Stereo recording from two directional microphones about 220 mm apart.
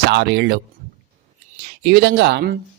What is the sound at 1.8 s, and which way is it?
Speech, 50° right (ahead or behind).